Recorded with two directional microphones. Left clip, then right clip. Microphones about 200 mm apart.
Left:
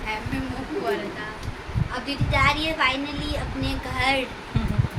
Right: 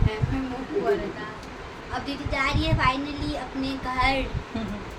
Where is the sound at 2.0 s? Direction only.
5° right (ahead or behind).